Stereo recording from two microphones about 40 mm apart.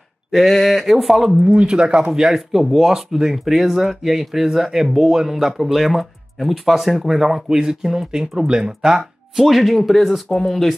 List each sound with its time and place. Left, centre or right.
0.3 s speech: centre
1.4 s speech: right
2.1 s speech: centre
9.4 s speech: centre